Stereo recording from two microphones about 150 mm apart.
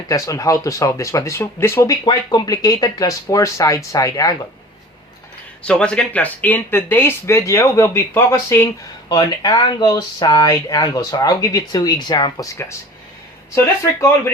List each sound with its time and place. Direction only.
0.1 s speech: 20° left (ahead or behind)
5.6 s speech: 5° left (ahead or behind); by 12.5 s 30° left (ahead or behind)